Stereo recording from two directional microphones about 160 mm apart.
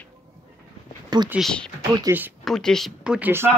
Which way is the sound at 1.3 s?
Centre (ahead or behind).